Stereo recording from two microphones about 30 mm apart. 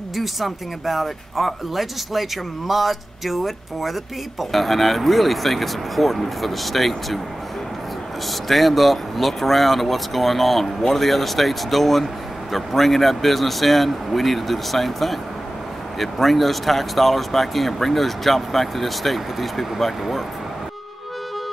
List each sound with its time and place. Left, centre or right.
0.1 s speech: centre
8.5 s speech: centre